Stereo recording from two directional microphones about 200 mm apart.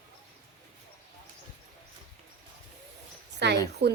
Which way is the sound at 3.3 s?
55° right (ahead or behind).